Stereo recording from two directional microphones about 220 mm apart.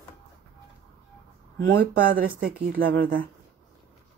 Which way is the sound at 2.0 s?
40° right (ahead or behind).